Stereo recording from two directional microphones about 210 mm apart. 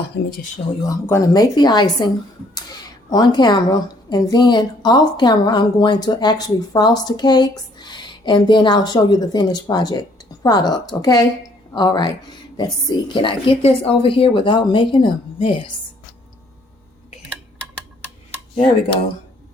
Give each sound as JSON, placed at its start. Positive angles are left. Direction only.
{"t": 0.8, "sound": "a woman's voice", "side_deg": 15}